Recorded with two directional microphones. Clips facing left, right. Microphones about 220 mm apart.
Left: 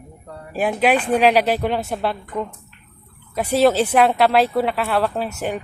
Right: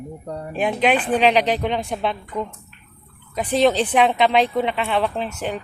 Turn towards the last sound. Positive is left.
turn(degrees=10)  # may be behind; listen again after turning